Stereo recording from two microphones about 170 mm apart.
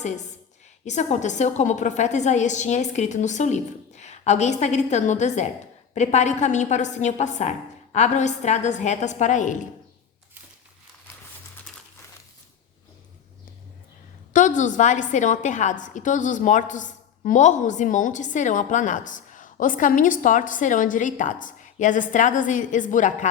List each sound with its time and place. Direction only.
0.9 s a woman's voice: 45° left (ahead or behind)
14.3 s a woman's voice: 50° left (ahead or behind)